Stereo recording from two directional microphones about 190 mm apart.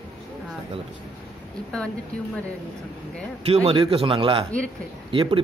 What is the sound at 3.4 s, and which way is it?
A man's voice, 30° right (ahead or behind).